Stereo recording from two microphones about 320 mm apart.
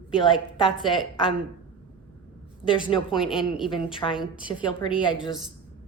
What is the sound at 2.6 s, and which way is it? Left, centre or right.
Speech, centre.